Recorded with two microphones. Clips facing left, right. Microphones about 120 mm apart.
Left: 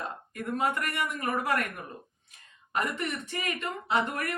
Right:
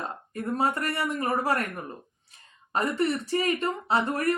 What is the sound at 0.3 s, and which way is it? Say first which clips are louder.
Speech: right 3 dB; 35° right (ahead or behind).